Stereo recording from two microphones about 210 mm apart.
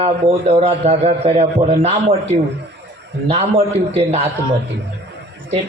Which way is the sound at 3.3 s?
30° right (ahead or behind).